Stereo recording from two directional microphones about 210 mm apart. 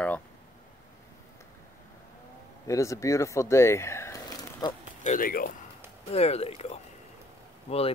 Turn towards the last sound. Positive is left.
turn(degrees=30)  # may be behind; listen again after turning